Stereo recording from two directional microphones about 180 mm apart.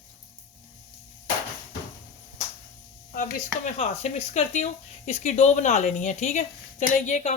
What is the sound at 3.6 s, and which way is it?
Speech, 40° left (ahead or behind).